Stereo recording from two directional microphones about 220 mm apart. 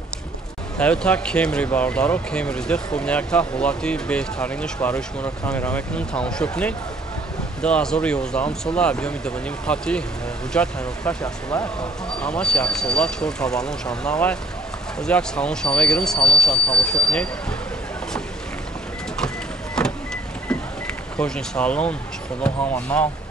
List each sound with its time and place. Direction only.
0.7 s speech: 5° left (ahead or behind)
11.2 s speech: 15° left (ahead or behind)
12.2 s speech: 5° left (ahead or behind)
19.1 s a sound: 5° left (ahead or behind)
21.2 s speech: 5° left (ahead or behind)